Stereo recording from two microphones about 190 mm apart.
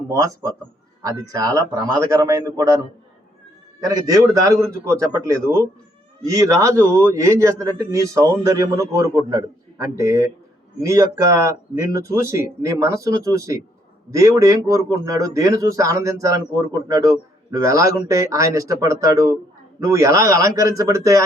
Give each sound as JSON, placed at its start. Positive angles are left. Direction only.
{"t": 0.1, "sound": "a man's voice", "side_deg": -15}
{"t": 3.8, "sound": "a man's voice", "side_deg": -20}